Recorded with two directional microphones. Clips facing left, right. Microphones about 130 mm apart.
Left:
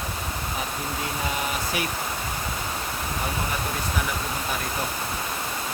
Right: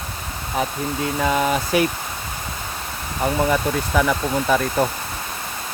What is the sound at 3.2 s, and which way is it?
Speech, 90° right.